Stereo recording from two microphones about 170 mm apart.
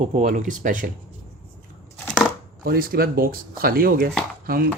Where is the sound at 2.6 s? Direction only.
60° right (ahead or behind).